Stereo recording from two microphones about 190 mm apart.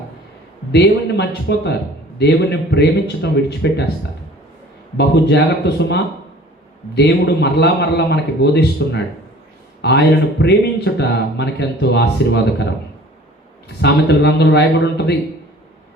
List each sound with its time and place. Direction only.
0.7 s speech: 60° left (ahead or behind)
4.9 s speech: 60° left (ahead or behind)
13.8 s speech: 65° left (ahead or behind)